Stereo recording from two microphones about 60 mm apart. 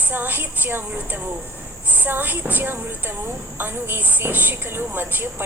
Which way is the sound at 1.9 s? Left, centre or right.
Right.